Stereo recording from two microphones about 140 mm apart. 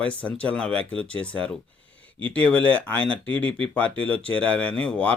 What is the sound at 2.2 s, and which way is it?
Speech, 10° left (ahead or behind).